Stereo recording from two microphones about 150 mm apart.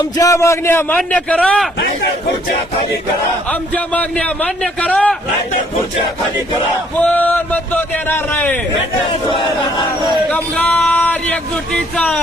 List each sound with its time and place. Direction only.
0.0 s a man's voice: 20° left (ahead or behind)
3.5 s speech: 10° left (ahead or behind)
6.7 s speech: 10° left (ahead or behind)
9.3 s battle cry: 35° left (ahead or behind)
10.3 s speech: 10° left (ahead or behind)